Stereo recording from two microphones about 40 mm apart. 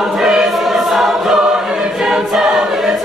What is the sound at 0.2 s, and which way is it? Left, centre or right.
Choir, centre.